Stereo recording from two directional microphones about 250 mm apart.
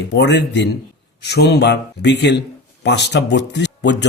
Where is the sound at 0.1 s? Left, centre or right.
Left.